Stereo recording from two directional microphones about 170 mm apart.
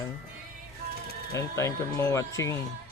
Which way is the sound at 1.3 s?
15° left (ahead or behind).